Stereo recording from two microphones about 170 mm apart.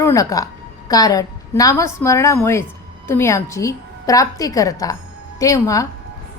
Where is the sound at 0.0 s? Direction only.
20° left (ahead or behind).